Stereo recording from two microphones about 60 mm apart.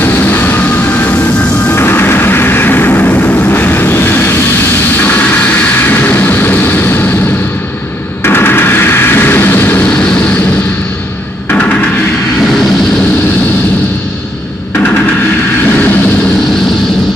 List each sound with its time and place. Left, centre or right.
0.0 s train: left
1.7 s vehicle: left
8.2 s a sound: left